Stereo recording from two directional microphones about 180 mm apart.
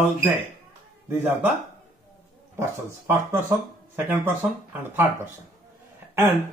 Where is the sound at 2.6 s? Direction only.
15° right (ahead or behind).